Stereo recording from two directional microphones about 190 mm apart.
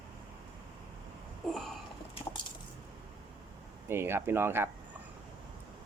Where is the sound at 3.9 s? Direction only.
10° right (ahead or behind).